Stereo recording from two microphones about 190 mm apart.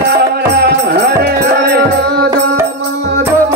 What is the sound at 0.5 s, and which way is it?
Music, 55° right (ahead or behind).